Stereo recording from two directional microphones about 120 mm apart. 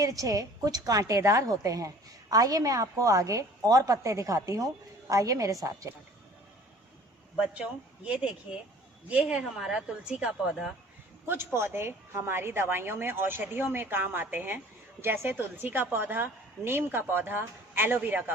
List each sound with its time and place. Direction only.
0.0 s a woman's voice: 30° right (ahead or behind)
7.3 s a woman's voice: 10° right (ahead or behind)
11.3 s a woman's voice: 20° right (ahead or behind)